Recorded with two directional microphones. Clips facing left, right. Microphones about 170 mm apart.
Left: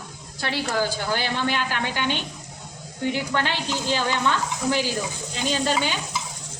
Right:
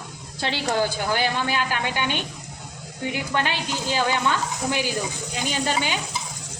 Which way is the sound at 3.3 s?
15° right (ahead or behind).